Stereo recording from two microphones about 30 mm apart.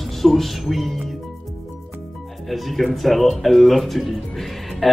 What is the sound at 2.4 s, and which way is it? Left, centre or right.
A man's voice, centre.